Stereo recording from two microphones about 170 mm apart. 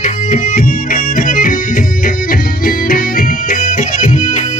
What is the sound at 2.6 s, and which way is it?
Music, 55° left (ahead or behind).